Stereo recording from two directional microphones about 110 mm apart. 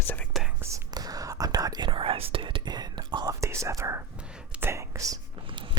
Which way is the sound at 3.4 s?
30° right (ahead or behind).